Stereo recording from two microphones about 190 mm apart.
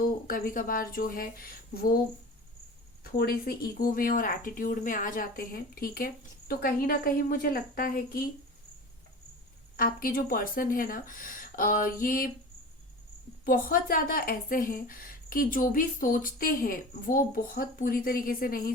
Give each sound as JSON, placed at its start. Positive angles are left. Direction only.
{"t": 0.3, "sound": "speech", "side_deg": 50}
{"t": 3.0, "sound": "speech", "side_deg": 55}
{"t": 9.7, "sound": "speech", "side_deg": 50}
{"t": 13.4, "sound": "speech", "side_deg": 50}